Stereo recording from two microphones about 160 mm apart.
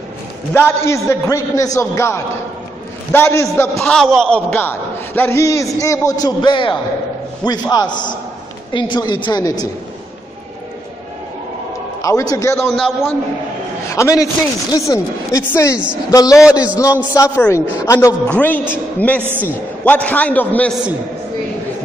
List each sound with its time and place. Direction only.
0.5 s a man's voice: 15° left (ahead or behind)
3.7 s a man's voice: 5° left (ahead or behind)
4.5 s a man's voice: 10° left (ahead or behind)
12.0 s a man's voice: 20° left (ahead or behind)
12.7 s a man's voice: centre (ahead or behind)
13.9 s a man's voice: 20° left (ahead or behind)